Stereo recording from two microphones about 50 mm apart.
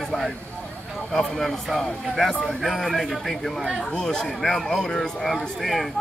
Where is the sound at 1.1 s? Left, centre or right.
Centre.